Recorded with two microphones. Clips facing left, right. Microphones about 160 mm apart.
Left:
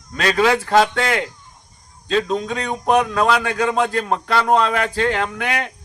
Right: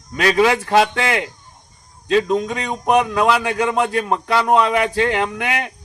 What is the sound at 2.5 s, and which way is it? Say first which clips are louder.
A man's voice: even; 15° right (ahead or behind).